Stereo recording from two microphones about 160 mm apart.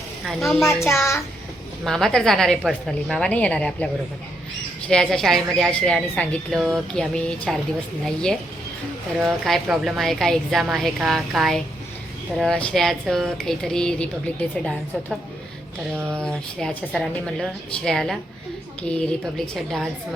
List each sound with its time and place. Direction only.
0.3 s a woman's voice: centre (ahead or behind)
0.7 s a child's voice: 15° left (ahead or behind)
1.8 s a woman's voice: 5° left (ahead or behind)
4.9 s a woman's voice: 5° left (ahead or behind)
16.0 s speech: 15° right (ahead or behind)
16.2 s a woman's voice: 5° left (ahead or behind)